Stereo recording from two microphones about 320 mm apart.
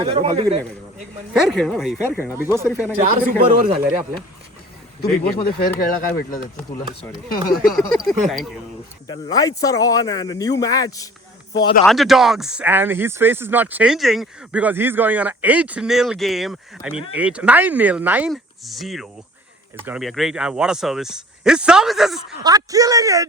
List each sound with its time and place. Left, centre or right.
0.0 s a man's voice: centre
1.3 s speech: centre
2.6 s speech: centre
3.0 s speech: right
5.0 s speech: left
7.6 s speech: centre
9.0 s speech: centre
11.9 s speech: centre
22.4 s a man's voice: centre